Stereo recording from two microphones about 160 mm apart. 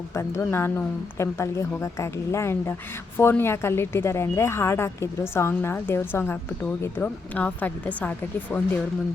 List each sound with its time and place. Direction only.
0.1 s speech: 15° left (ahead or behind)